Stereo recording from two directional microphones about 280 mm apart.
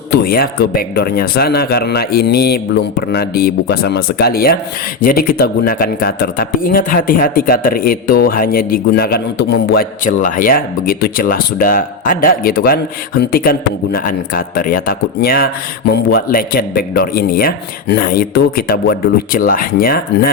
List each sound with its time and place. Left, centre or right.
0.1 s speech: left